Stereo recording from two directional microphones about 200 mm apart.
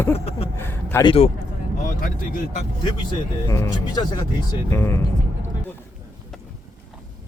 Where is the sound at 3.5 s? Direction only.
15° left (ahead or behind).